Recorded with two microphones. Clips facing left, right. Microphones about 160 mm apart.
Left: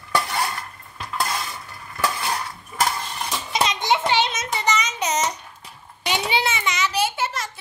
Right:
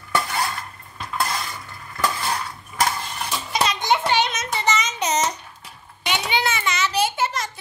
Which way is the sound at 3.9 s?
25° left (ahead or behind).